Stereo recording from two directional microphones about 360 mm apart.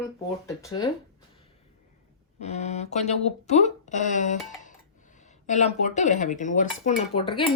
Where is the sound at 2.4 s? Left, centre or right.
Centre.